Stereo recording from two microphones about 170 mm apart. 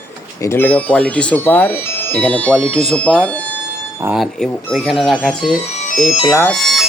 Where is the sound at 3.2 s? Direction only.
10° left (ahead or behind).